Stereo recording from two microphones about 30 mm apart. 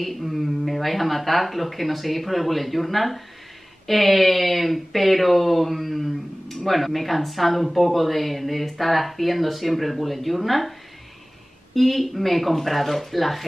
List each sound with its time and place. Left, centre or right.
0.0 s speech: centre
11.7 s speech: centre